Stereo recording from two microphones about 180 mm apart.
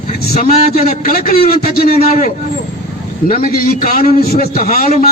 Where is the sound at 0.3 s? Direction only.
50° left (ahead or behind).